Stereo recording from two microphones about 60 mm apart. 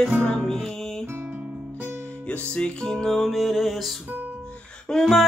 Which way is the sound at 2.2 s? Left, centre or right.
Centre.